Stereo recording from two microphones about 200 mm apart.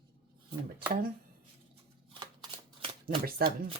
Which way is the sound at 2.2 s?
25° right (ahead or behind).